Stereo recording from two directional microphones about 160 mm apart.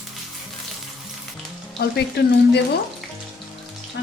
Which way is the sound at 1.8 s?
90° left.